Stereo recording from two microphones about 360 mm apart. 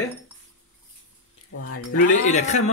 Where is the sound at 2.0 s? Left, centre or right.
Centre.